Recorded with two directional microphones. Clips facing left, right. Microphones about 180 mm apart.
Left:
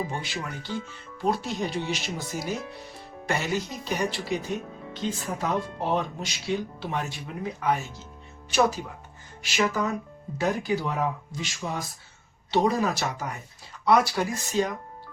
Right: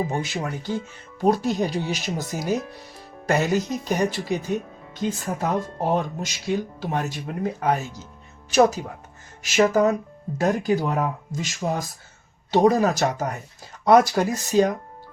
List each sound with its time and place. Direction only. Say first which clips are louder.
0.1 s speech: right 6 dB; 45° right (ahead or behind)